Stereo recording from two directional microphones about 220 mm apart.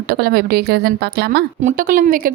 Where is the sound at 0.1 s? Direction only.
45° right (ahead or behind).